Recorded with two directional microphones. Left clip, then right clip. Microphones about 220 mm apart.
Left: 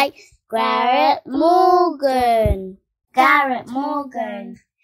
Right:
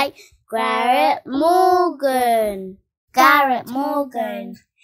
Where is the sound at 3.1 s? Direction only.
50° right (ahead or behind).